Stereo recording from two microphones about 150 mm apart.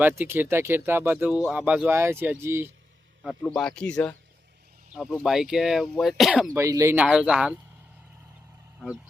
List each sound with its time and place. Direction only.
0.0 s speech: 15° right (ahead or behind)
3.2 s speech: centre (ahead or behind)
4.9 s speech: 5° right (ahead or behind)
6.5 s speech: 20° right (ahead or behind)
6.9 s speech: 5° right (ahead or behind)